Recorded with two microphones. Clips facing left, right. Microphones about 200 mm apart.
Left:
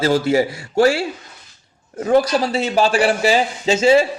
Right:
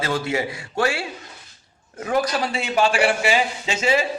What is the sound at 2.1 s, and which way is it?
A man's voice, 35° left (ahead or behind).